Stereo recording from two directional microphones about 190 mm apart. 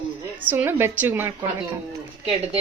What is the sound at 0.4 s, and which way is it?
Speech, 10° right (ahead or behind).